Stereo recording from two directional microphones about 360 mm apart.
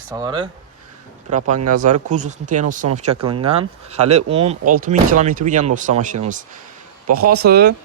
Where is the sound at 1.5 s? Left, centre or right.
Right.